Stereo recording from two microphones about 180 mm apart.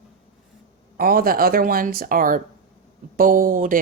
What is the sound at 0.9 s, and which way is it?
Speech, 55° right (ahead or behind).